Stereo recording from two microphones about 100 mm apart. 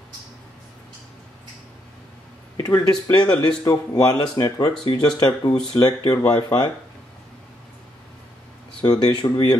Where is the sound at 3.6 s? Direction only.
35° left (ahead or behind).